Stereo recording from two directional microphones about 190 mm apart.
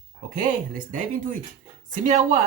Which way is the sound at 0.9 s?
40° right (ahead or behind).